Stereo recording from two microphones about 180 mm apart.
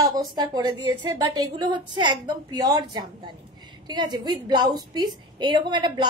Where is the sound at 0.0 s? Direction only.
20° right (ahead or behind).